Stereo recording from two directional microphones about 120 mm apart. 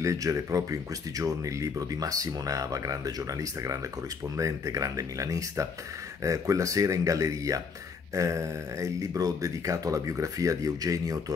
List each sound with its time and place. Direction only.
0.0 s speech: 25° right (ahead or behind)